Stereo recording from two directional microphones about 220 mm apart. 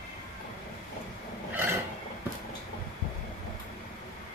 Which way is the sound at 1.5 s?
10° right (ahead or behind).